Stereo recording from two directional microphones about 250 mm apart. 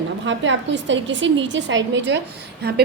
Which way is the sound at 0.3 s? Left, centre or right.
Right.